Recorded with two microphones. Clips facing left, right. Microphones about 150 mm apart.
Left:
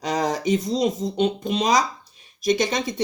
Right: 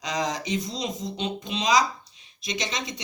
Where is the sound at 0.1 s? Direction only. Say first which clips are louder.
Left 6 dB; 45° left (ahead or behind).